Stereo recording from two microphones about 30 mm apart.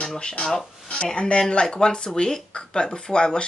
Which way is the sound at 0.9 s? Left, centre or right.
Left.